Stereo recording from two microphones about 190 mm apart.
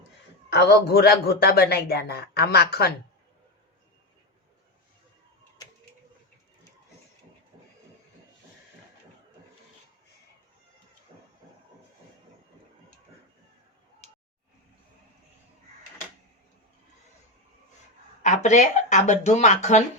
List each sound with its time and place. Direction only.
0.5 s a man's voice: 60° left (ahead or behind)
14.0 s a sound: 35° left (ahead or behind)
18.2 s speech: 40° left (ahead or behind)